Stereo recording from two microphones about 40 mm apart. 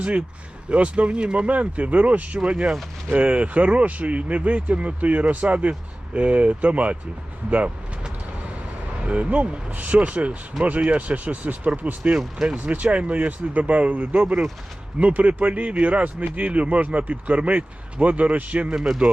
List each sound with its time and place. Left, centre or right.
0.7 s speech: right
1.5 s speech: right
9.0 s speech: right
18.7 s speech: centre